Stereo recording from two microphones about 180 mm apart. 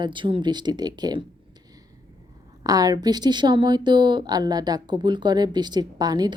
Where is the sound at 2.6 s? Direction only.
20° right (ahead or behind).